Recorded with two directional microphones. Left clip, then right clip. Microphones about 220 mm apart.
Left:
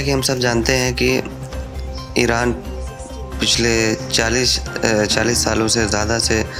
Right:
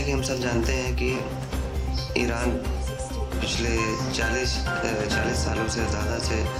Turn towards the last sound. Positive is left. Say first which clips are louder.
# left 10 dB
turn(degrees=35)  # may be behind; listen again after turning